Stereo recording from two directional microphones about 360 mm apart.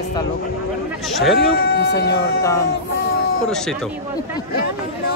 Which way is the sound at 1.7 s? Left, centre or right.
Left.